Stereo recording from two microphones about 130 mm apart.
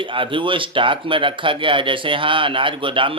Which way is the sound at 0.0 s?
40° right (ahead or behind).